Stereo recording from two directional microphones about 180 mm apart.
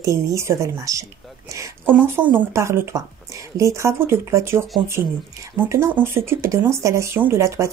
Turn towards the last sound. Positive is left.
turn(degrees=-15)  # may be behind; listen again after turning